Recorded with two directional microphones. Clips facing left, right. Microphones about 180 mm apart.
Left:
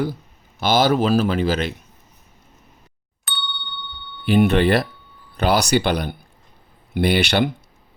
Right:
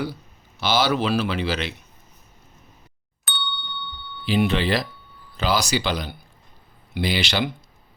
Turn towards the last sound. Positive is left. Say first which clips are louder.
# left 6 dB
turn(degrees=60)  # may be behind; listen again after turning